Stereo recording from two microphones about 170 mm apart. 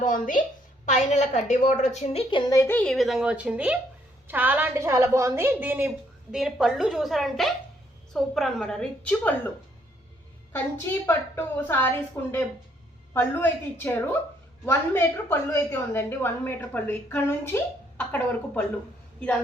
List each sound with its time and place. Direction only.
0.0 s a woman's voice: 50° left (ahead or behind); by 9.5 s 5° left (ahead or behind)
10.5 s a woman's voice: 10° left (ahead or behind)